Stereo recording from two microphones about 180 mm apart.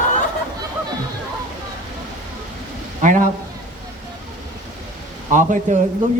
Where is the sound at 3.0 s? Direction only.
45° right (ahead or behind).